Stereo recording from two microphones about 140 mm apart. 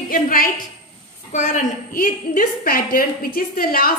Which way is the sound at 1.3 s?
60° left (ahead or behind).